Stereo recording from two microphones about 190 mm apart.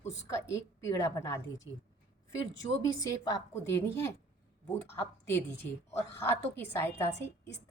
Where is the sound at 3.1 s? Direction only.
20° left (ahead or behind).